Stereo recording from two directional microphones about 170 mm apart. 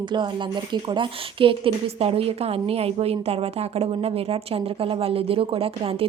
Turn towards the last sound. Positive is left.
turn(degrees=-35)  # may be behind; listen again after turning